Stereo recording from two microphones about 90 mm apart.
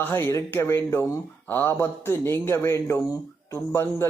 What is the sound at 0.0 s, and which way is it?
Speech, 25° left (ahead or behind).